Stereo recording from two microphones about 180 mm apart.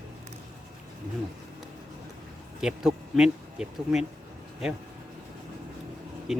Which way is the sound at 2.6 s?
5° right (ahead or behind).